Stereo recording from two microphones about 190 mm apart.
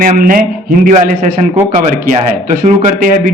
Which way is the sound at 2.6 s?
45° right (ahead or behind).